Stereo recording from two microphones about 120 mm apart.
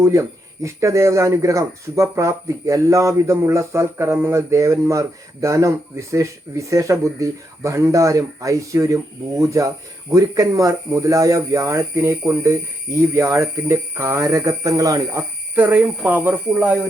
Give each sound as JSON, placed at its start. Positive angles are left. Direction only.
{"t": 0.0, "sound": "speech", "side_deg": -25}
{"t": 15.5, "sound": "speech", "side_deg": -15}